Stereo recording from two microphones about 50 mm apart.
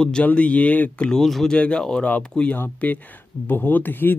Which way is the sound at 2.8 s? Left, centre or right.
Left.